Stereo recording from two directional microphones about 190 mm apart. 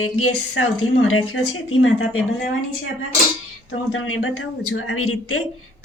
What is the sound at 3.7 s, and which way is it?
Speech, 90° left.